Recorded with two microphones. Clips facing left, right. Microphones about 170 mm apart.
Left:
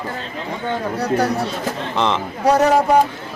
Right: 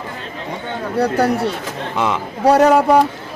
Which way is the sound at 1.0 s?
30° right (ahead or behind).